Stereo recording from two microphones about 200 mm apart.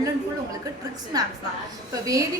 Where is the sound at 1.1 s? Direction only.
20° right (ahead or behind).